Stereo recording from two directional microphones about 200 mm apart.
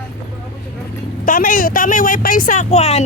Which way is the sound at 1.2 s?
45° left (ahead or behind).